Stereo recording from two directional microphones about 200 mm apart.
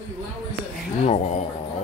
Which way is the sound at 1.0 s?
35° left (ahead or behind).